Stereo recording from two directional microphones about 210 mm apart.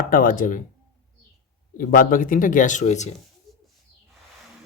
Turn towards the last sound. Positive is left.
turn(degrees=0)  # may be behind; listen again after turning